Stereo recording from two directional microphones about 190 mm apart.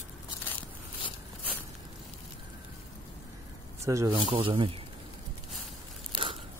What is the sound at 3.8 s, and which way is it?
Speech, 15° right (ahead or behind).